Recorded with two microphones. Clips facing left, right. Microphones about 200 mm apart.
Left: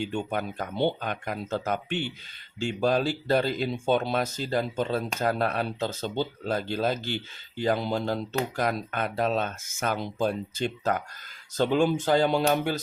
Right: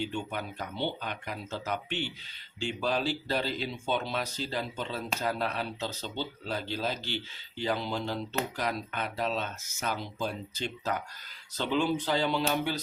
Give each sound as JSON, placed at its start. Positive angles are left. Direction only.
{"t": 0.0, "sound": "speech", "side_deg": 50}